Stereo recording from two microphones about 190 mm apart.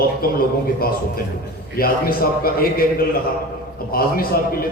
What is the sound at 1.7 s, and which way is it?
A man's voice, 50° left (ahead or behind).